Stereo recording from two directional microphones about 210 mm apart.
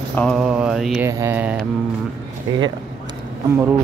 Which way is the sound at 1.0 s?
10° right (ahead or behind).